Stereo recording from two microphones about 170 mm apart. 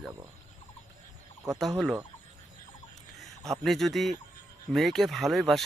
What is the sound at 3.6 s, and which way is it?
Speech, centre (ahead or behind).